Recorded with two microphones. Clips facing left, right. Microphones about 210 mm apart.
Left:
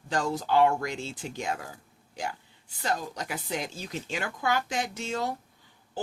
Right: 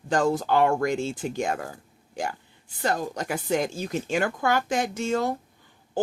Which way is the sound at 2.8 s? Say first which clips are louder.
Right 5 dB; 50° right (ahead or behind).